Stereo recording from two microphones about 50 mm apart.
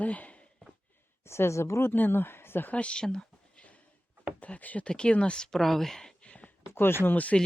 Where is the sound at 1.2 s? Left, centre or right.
Left.